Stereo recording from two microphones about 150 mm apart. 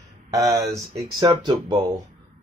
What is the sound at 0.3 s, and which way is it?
Speech, 20° right (ahead or behind).